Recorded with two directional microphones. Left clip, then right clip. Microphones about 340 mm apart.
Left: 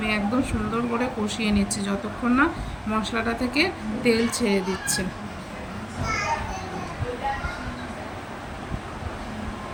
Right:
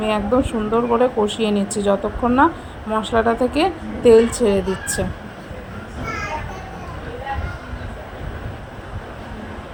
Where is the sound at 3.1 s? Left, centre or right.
Right.